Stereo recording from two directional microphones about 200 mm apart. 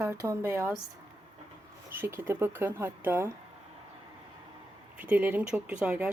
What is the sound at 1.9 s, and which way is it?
Speech, 10° right (ahead or behind).